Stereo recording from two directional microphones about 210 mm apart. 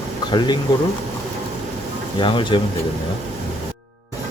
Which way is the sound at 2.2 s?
20° left (ahead or behind).